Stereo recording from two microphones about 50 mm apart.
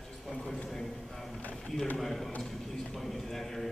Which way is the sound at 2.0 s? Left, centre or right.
Centre.